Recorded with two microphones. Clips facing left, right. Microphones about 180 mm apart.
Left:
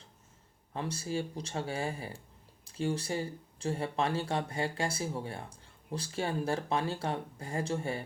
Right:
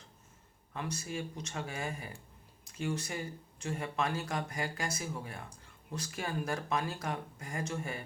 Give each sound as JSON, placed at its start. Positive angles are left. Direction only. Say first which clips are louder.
{"t": 0.7, "sound": "speech", "louder": "left 4 dB", "side_deg": 30}